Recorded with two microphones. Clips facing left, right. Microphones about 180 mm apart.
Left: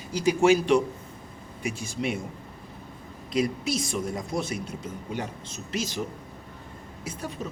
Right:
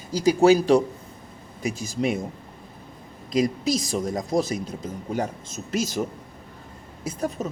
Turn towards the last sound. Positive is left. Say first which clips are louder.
# right 6 dB
turn(degrees=-40)  # may be behind; listen again after turning